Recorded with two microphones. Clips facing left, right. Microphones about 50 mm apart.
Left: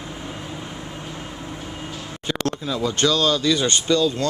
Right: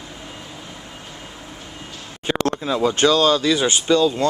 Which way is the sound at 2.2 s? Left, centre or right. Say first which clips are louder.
Right 4 dB; right.